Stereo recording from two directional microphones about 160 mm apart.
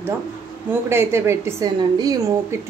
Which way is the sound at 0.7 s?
15° right (ahead or behind).